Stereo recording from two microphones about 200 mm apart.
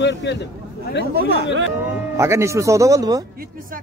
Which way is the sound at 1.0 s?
50° right (ahead or behind).